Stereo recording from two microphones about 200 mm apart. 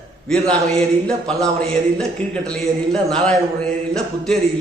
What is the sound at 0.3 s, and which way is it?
A man's voice, 5° left (ahead or behind).